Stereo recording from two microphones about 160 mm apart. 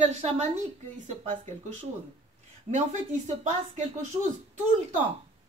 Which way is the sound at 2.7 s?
45° right (ahead or behind).